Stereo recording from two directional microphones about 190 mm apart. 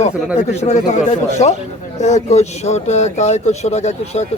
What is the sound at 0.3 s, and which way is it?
Speech, 35° left (ahead or behind).